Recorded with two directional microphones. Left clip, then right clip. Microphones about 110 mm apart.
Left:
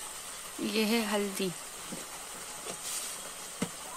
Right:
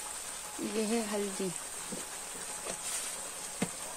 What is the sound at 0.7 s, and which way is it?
Speech, 15° left (ahead or behind).